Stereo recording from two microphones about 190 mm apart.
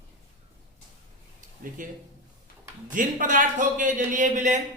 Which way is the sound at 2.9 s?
45° right (ahead or behind).